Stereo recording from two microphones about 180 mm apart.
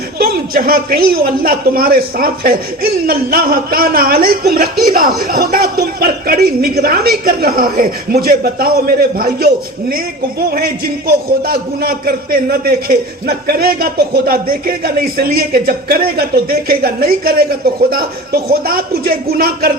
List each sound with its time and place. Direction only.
0.2 s a man's voice: 55° right (ahead or behind)
10.5 s a man's voice: 55° right (ahead or behind)